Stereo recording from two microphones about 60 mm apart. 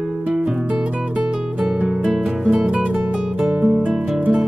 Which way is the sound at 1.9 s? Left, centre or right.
Centre.